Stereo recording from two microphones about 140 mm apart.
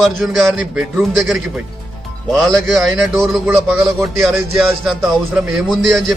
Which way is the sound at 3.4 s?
10° right (ahead or behind).